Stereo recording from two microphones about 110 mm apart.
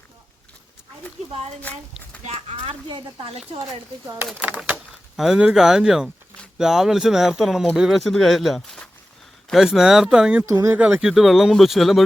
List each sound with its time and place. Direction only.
2.2 s speech: 70° right (ahead or behind)
4.4 s speech: 15° right (ahead or behind)
10.4 s speech: 30° right (ahead or behind)
11.0 s speech: centre (ahead or behind)